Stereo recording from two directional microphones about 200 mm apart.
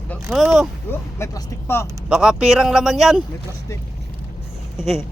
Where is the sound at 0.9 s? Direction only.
15° left (ahead or behind).